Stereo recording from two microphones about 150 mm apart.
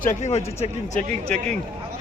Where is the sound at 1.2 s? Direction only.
5° left (ahead or behind).